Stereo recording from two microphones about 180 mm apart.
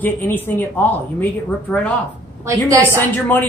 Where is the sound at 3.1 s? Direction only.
10° left (ahead or behind).